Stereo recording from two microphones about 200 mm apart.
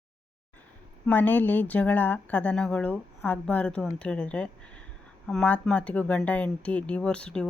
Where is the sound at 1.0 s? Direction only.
10° left (ahead or behind).